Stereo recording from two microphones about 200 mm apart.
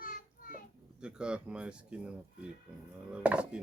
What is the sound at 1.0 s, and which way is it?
Speech, 5° right (ahead or behind).